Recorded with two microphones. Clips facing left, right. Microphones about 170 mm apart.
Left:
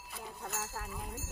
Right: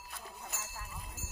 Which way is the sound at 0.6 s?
70° left (ahead or behind).